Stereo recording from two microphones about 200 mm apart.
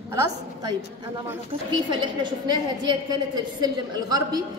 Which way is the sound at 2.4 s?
20° right (ahead or behind).